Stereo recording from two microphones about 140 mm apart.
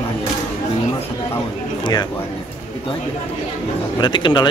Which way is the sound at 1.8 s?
30° left (ahead or behind).